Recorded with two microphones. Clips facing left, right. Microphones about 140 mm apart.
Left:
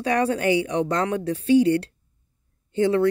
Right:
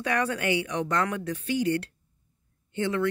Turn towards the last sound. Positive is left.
turn(degrees=35)  # may be behind; listen again after turning